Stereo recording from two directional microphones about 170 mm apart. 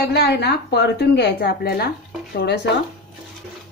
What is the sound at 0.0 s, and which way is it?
A woman's voice, 75° left (ahead or behind).